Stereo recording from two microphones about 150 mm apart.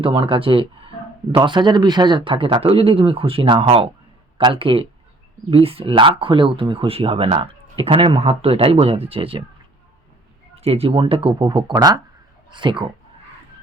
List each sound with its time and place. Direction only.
0.0 s speech: 35° right (ahead or behind)
10.5 s speech: 45° right (ahead or behind)